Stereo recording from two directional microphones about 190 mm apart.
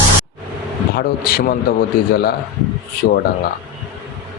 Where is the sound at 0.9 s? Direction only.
50° left (ahead or behind).